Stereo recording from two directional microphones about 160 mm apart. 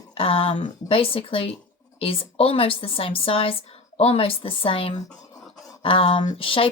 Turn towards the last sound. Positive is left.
turn(degrees=35)  # may be behind; listen again after turning